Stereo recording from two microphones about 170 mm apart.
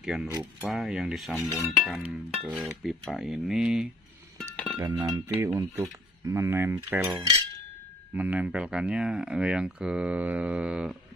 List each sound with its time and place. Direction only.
0.0 s speech: 5° right (ahead or behind)
4.4 s music: 5° left (ahead or behind)
4.8 s cutlery: 25° right (ahead or behind)
5.6 s speech: 20° right (ahead or behind)
8.1 s speech: 10° right (ahead or behind)